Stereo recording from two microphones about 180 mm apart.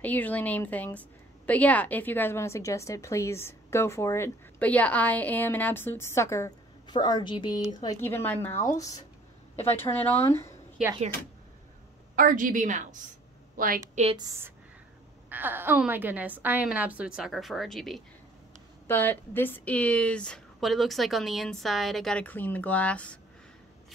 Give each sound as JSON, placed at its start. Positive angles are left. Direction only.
{"t": 0.0, "sound": "a woman's voice", "side_deg": 10}
{"t": 12.2, "sound": "a woman's voice", "side_deg": -50}
{"t": 14.1, "sound": "a woman's voice", "side_deg": -20}
{"t": 15.2, "sound": "a woman's voice", "side_deg": -10}